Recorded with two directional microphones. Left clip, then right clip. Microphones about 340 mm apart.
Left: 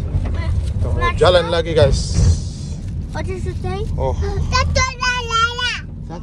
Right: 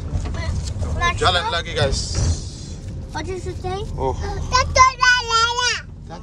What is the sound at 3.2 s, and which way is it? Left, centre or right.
A child's voice, centre.